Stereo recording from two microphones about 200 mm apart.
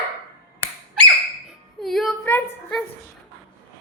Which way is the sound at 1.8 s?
Centre (ahead or behind).